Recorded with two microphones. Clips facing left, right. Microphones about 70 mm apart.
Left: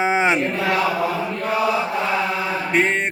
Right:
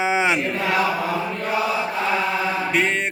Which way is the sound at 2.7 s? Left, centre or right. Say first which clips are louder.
Left 4 dB; left.